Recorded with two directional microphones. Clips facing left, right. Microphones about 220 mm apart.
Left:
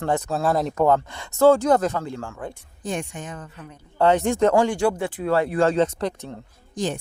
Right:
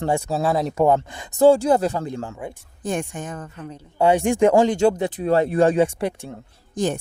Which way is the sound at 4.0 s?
10° right (ahead or behind).